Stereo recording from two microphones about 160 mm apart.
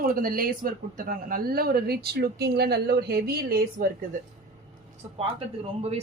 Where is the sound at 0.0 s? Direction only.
65° right (ahead or behind).